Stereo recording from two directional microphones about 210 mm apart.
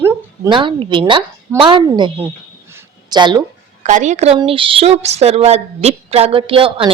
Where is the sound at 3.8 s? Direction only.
35° right (ahead or behind).